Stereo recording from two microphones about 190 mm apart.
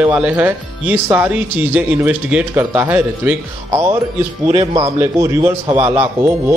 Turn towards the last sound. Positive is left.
turn(degrees=-10)  # may be behind; listen again after turning